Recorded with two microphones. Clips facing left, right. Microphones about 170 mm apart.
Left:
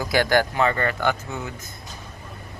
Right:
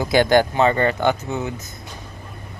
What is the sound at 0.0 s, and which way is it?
Speech, 20° right (ahead or behind).